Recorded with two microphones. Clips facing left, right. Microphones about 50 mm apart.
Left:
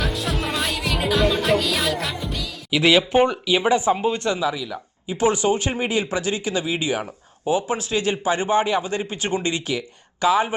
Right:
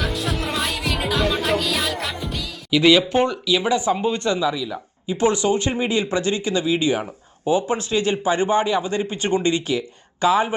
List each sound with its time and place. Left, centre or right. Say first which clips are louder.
0.0 s music: even; centre
2.6 s speech: right 2 dB; centre
3.9 s speech: right 1 dB; centre